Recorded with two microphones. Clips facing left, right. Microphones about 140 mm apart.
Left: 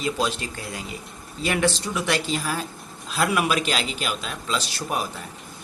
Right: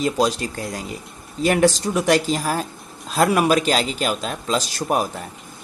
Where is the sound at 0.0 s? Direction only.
40° right (ahead or behind).